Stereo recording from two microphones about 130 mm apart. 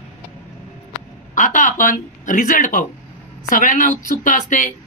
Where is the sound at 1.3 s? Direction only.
90° left.